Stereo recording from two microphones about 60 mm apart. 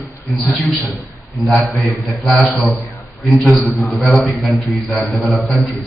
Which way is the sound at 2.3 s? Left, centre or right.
Centre.